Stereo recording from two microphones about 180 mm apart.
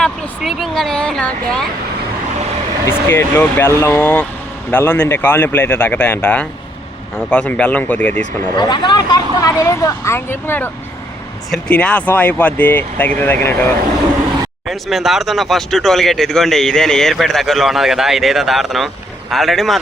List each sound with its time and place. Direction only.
0.0 s speech: centre (ahead or behind)
3.1 s speech: 15° left (ahead or behind)
8.5 s speech: 25° left (ahead or behind)
14.7 s speech: centre (ahead or behind)